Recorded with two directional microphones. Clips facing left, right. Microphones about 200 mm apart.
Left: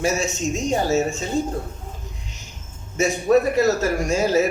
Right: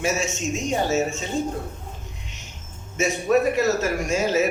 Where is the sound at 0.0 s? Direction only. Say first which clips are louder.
Left 2 dB; 35° left (ahead or behind).